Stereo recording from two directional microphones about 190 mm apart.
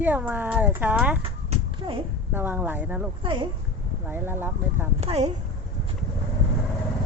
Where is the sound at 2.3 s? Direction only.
10° right (ahead or behind).